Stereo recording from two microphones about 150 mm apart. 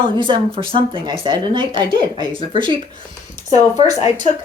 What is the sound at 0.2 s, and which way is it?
Speech, 35° right (ahead or behind).